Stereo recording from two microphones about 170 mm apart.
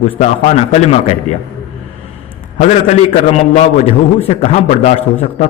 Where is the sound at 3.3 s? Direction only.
40° left (ahead or behind).